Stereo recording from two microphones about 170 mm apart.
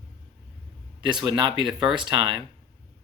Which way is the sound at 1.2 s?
25° right (ahead or behind).